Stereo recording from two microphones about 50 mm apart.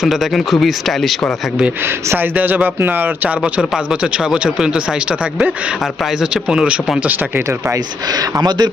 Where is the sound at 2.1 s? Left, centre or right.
Right.